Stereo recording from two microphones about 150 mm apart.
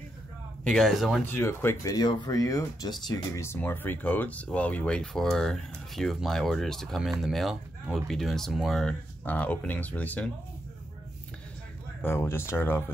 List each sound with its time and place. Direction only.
0.7 s speech: centre (ahead or behind)
1.3 s speech: 15° left (ahead or behind)
12.0 s speech: 15° left (ahead or behind)